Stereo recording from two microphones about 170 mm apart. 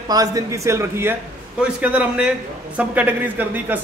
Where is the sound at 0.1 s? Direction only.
20° right (ahead or behind).